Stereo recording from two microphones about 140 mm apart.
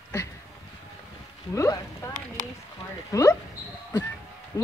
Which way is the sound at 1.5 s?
20° left (ahead or behind).